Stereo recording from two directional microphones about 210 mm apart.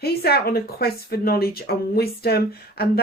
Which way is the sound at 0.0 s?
45° left (ahead or behind).